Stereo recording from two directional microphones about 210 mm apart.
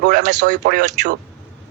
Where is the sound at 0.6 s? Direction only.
50° right (ahead or behind).